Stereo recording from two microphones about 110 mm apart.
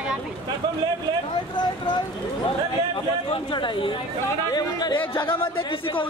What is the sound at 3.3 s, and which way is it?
Speech, 50° left (ahead or behind).